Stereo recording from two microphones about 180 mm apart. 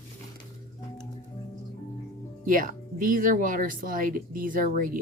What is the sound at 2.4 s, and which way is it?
Speech, 50° right (ahead or behind).